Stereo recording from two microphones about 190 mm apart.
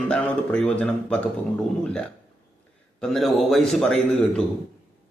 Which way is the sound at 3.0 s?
Centre (ahead or behind).